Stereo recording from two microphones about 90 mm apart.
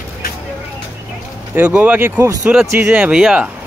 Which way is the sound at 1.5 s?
15° right (ahead or behind).